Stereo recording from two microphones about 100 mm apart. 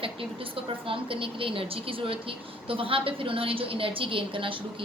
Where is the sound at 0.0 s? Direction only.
65° right (ahead or behind).